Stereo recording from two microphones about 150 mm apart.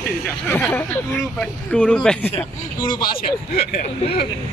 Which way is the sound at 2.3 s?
30° left (ahead or behind).